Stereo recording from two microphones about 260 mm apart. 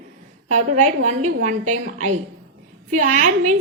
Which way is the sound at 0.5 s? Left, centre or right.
Right.